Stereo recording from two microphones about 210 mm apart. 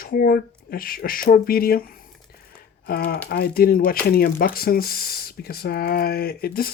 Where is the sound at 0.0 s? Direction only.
45° left (ahead or behind).